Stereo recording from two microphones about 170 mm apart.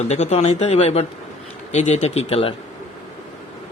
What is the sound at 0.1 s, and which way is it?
Speech, 40° left (ahead or behind).